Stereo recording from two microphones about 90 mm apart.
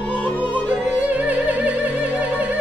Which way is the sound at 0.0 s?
15° left (ahead or behind).